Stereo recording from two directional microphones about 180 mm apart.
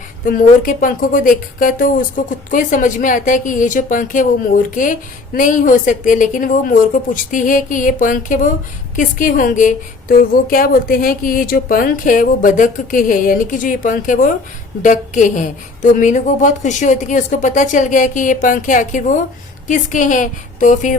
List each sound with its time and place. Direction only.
0.3 s speech: 50° left (ahead or behind)